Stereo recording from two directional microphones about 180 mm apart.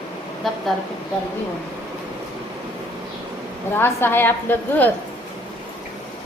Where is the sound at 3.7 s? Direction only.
10° left (ahead or behind).